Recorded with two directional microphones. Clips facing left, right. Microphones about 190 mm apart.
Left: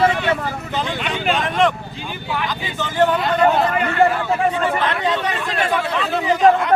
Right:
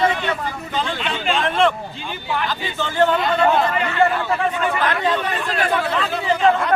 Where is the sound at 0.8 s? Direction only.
15° left (ahead or behind).